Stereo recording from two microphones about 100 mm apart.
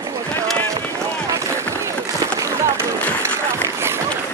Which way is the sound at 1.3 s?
30° right (ahead or behind).